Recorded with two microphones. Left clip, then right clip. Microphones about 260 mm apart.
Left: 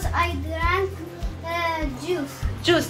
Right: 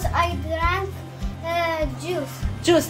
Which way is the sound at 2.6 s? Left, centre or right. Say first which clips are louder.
Right 2 dB; right.